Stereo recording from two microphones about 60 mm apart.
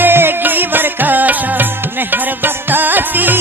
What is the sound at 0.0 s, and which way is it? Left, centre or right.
Music, right.